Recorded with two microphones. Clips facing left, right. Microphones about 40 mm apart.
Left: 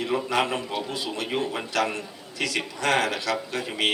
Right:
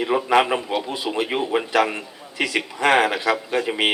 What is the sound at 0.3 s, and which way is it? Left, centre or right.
Speech, right.